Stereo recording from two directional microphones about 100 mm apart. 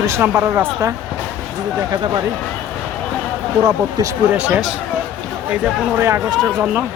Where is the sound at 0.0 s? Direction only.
25° right (ahead or behind).